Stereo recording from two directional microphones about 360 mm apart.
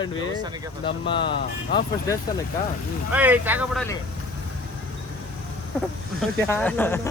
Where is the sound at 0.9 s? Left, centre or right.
Centre.